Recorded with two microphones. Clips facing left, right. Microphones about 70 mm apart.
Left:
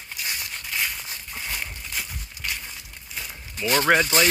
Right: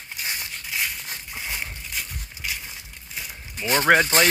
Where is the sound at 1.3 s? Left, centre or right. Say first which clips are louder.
Even; centre.